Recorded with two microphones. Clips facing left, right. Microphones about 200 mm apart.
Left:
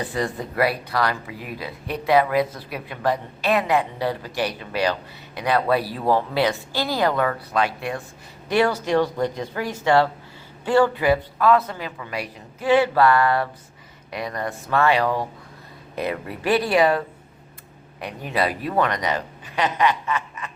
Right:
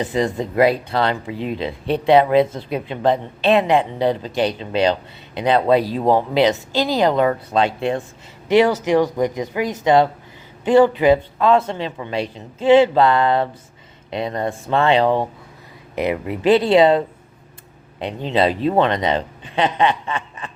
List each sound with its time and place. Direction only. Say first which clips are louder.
0.0 s speech: right 6 dB; 20° right (ahead or behind)
18.0 s speech: right 6 dB; 25° right (ahead or behind)